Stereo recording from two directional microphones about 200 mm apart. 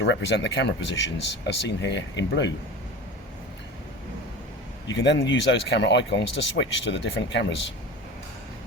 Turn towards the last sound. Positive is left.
turn(degrees=65)  # may be behind; listen again after turning